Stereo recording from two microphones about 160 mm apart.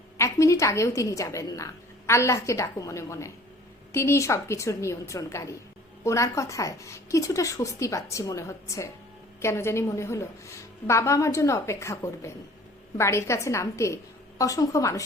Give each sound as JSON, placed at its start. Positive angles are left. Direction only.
{"t": 0.2, "sound": "a woman's voice", "side_deg": 20}